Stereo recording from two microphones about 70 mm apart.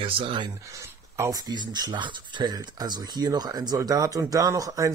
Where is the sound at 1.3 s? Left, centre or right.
Right.